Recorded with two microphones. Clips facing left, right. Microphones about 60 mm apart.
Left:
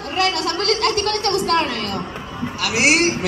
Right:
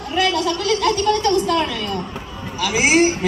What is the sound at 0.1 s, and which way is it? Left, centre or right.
A woman's voice, left.